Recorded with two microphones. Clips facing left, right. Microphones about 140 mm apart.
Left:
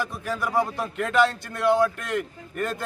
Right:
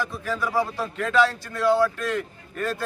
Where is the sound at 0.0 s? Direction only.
15° left (ahead or behind).